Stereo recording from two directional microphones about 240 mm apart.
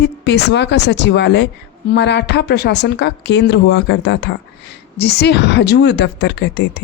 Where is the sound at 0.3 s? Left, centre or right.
Left.